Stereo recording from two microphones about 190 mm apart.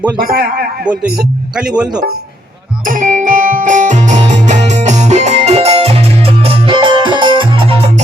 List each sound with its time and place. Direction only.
0.3 s a man's voice: 55° right (ahead or behind)
1.5 s speech: 5° right (ahead or behind)
2.8 s music: 45° right (ahead or behind); by 7.8 s 25° right (ahead or behind)